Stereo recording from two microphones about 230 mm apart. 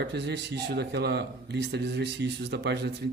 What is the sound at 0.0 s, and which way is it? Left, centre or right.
Speech, right.